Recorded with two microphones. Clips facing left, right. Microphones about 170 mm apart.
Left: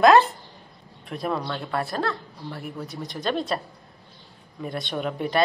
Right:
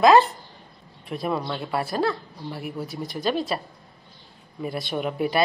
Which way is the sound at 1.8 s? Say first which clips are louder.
Right 3 dB; 5° right (ahead or behind).